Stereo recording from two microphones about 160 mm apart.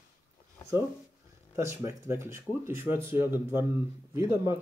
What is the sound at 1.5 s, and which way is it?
A man's voice, 15° right (ahead or behind).